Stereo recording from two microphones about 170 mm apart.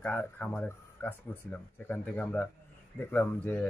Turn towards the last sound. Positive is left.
turn(degrees=10)  # may be behind; listen again after turning